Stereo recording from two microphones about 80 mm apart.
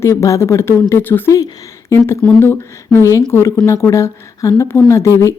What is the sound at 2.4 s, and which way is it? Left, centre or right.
A woman's voice, left.